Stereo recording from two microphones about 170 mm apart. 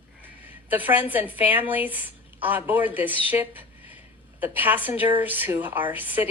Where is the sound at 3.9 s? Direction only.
10° right (ahead or behind).